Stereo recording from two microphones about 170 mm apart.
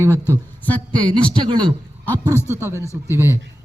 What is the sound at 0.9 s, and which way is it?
Speech, 30° right (ahead or behind).